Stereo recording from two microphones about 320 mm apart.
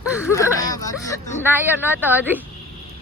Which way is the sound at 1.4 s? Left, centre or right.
Centre.